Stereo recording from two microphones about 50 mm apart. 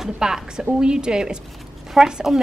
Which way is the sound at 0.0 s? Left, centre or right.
Centre.